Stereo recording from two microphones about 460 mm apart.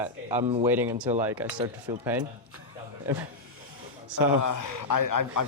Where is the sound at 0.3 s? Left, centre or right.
Centre.